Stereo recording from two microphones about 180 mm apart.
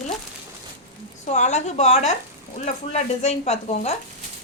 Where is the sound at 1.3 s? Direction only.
40° left (ahead or behind).